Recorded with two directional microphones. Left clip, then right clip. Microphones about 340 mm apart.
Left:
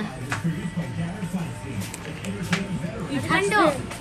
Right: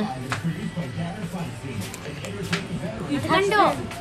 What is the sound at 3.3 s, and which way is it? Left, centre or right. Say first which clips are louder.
Speech: right 1 dB; right.